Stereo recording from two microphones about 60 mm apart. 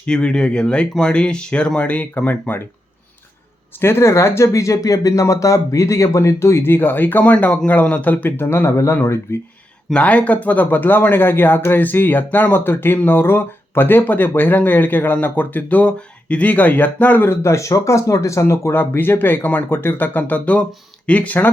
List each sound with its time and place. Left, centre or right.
0.0 s speech: centre; by 2.6 s left
3.8 s speech: left
8.4 s speech: left
9.9 s speech: left
17.5 s speech: left